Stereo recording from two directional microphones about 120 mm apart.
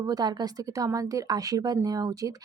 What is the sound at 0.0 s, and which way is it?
A woman's voice, 35° right (ahead or behind).